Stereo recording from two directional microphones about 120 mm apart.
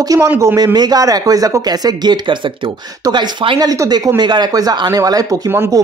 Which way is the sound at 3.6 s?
30° right (ahead or behind).